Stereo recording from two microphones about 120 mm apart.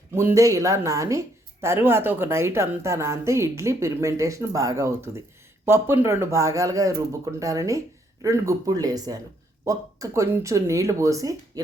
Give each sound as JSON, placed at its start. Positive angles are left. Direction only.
{"t": 0.1, "sound": "a woman's voice", "side_deg": -20}